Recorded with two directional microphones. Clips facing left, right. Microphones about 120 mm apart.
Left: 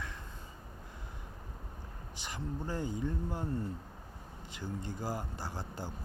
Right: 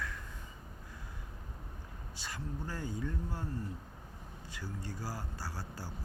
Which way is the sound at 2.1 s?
20° left (ahead or behind).